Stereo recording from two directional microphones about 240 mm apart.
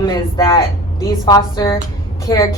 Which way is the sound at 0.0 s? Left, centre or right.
Centre.